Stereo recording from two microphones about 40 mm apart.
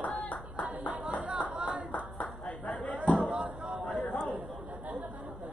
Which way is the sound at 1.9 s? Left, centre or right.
Left.